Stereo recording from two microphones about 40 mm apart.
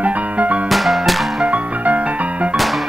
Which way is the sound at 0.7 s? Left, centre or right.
Centre.